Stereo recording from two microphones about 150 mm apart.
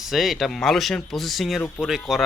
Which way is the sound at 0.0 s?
Centre (ahead or behind).